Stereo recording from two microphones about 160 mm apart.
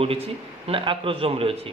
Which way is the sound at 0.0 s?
35° right (ahead or behind).